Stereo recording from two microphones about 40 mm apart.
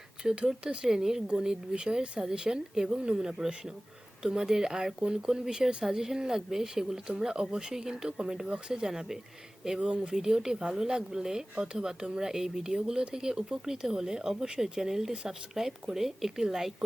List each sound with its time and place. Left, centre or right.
0.2 s speech: centre
9.7 s speech: right
10.2 s speech: centre